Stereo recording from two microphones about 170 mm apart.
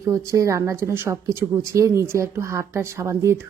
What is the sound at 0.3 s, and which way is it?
A woman's voice, 20° right (ahead or behind).